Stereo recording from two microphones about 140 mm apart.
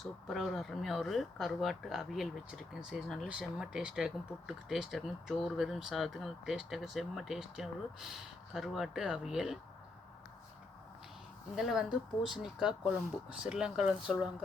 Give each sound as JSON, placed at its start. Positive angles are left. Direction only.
{"t": 0.0, "sound": "speech", "side_deg": 0}
{"t": 11.5, "sound": "speech", "side_deg": -5}